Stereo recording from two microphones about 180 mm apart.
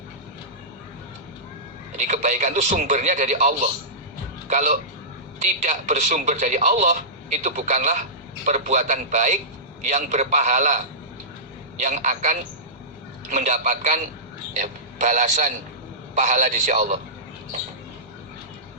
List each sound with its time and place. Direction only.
2.0 s a man's voice: 40° right (ahead or behind)